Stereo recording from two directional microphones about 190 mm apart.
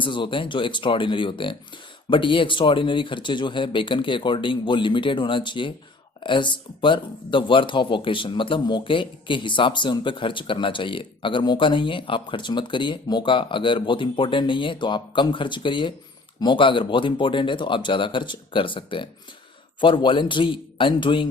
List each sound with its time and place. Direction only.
0.0 s speech: 25° left (ahead or behind)